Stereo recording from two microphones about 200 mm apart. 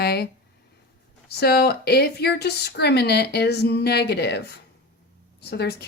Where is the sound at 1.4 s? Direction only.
50° left (ahead or behind).